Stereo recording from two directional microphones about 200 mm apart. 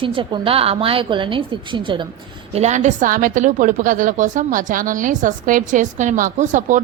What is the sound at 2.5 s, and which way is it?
A woman's voice, 35° right (ahead or behind).